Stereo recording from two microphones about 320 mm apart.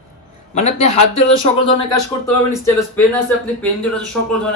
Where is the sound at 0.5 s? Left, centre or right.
Left.